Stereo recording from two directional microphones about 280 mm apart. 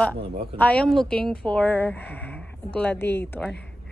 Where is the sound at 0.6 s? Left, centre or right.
Centre.